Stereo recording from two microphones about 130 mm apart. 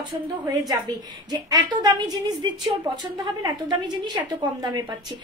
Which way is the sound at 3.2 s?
35° right (ahead or behind).